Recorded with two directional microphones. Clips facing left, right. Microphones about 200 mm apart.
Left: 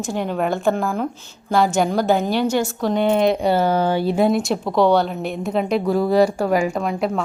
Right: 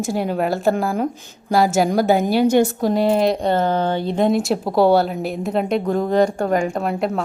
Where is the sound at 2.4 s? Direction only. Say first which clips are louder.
Right 5 dB; 55° right (ahead or behind).